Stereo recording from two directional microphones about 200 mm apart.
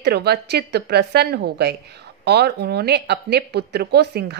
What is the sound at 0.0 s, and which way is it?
A woman's voice, 55° right (ahead or behind).